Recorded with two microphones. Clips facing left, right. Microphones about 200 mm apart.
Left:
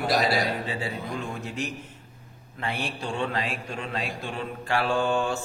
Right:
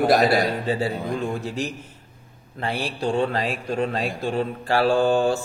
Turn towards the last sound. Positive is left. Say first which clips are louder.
# right 6 dB
turn(degrees=-35)  # may be behind; listen again after turning